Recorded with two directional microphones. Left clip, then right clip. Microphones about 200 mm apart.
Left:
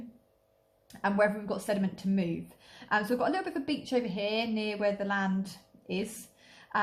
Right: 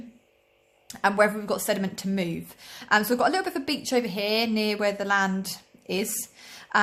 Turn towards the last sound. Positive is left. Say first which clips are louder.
# right 7 dB
turn(degrees=-35)  # may be behind; listen again after turning